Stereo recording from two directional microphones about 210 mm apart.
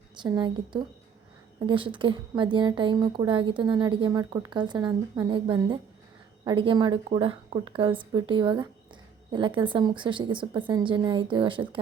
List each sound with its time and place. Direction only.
0.2 s a woman's voice: 20° right (ahead or behind)